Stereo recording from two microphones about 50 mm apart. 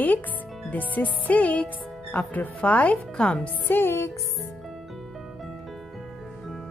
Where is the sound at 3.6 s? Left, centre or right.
Left.